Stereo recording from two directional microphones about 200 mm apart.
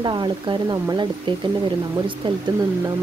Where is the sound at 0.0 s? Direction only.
20° right (ahead or behind).